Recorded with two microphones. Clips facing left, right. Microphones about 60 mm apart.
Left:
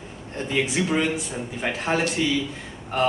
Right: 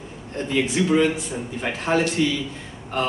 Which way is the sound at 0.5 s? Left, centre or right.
Centre.